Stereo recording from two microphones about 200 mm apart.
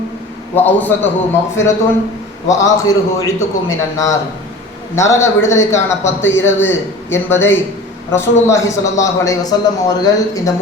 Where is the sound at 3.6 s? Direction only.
15° left (ahead or behind).